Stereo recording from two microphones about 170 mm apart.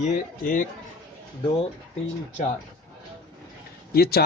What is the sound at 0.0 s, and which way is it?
Speech, 50° left (ahead or behind).